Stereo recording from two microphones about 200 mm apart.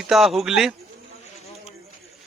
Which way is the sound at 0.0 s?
Centre (ahead or behind).